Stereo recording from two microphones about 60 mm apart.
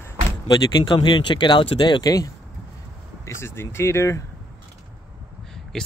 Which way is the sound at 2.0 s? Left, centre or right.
Left.